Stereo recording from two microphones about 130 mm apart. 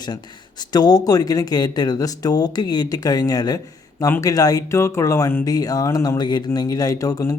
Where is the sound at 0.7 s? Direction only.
30° left (ahead or behind).